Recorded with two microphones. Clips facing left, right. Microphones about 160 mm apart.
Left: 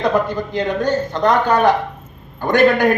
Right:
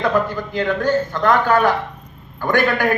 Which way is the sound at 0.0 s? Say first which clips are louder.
Left 1 dB; 20° left (ahead or behind).